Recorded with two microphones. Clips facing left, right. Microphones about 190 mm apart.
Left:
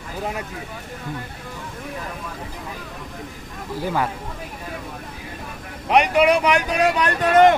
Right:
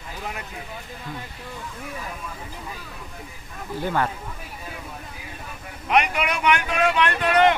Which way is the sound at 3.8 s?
10° left (ahead or behind).